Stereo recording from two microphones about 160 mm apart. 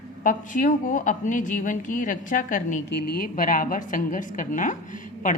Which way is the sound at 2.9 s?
80° left.